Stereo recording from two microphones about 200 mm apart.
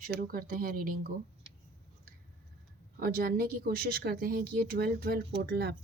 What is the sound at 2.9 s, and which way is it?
Speech, 45° right (ahead or behind).